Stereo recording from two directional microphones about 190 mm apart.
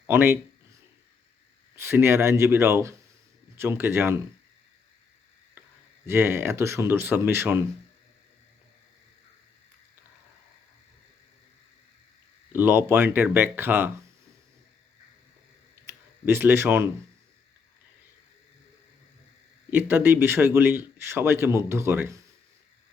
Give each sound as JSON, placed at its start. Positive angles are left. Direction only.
{"t": 0.1, "sound": "a man's voice", "side_deg": -10}
{"t": 1.7, "sound": "a man's voice", "side_deg": -10}
{"t": 6.1, "sound": "a man's voice", "side_deg": -10}
{"t": 12.5, "sound": "a man's voice", "side_deg": -10}
{"t": 15.9, "sound": "speech", "side_deg": -10}
{"t": 19.7, "sound": "a man's voice", "side_deg": -10}